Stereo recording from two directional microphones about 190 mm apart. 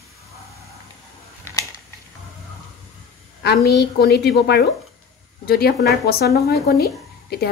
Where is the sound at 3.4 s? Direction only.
60° left (ahead or behind).